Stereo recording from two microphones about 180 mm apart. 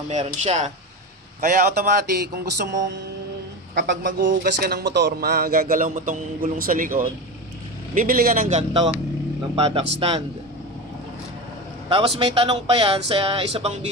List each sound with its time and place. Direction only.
0.1 s speech: 40° right (ahead or behind)
1.4 s a man's voice: 50° right (ahead or behind)
3.7 s speech: 75° right (ahead or behind)
4.2 s a man's voice: 50° right (ahead or behind); by 10.2 s 35° right (ahead or behind)
12.2 s speech: 30° right (ahead or behind)